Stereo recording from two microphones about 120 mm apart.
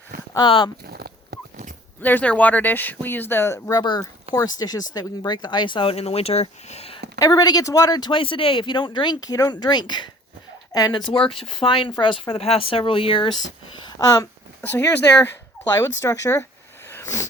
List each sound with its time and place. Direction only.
0.3 s speech: 40° left (ahead or behind)
2.0 s speech: 15° left (ahead or behind)
3.8 s speech: 35° left (ahead or behind); by 7.0 s 60° left (ahead or behind)
7.2 s speech: 30° left (ahead or behind)
11.0 s speech: 50° left (ahead or behind)
13.7 s speech: 35° left (ahead or behind)
14.7 s speech: 15° left (ahead or behind)